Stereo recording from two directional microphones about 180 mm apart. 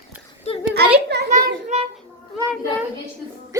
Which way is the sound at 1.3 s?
45° right (ahead or behind).